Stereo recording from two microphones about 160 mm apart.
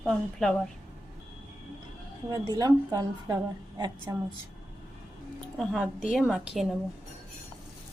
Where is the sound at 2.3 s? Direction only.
25° right (ahead or behind).